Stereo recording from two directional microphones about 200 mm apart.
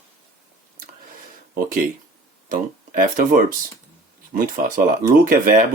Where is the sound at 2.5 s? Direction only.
45° right (ahead or behind).